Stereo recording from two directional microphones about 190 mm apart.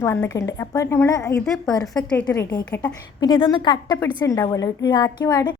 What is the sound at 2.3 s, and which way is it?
Speech, 15° left (ahead or behind).